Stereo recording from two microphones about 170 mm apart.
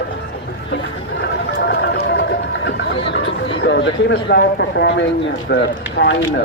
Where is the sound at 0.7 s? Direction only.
75° left (ahead or behind).